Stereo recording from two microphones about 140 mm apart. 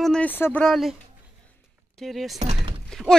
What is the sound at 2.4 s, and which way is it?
Door, 50° right (ahead or behind).